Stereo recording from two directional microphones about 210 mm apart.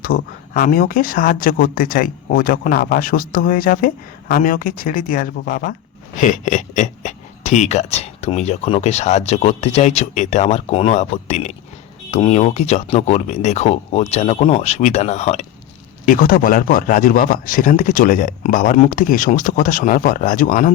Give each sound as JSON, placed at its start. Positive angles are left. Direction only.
{"t": 0.0, "sound": "speech", "side_deg": 40}